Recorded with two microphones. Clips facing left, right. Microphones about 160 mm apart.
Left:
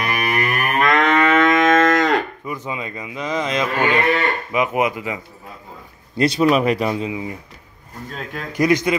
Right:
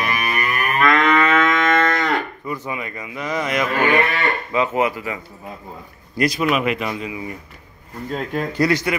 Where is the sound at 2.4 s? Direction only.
15° left (ahead or behind).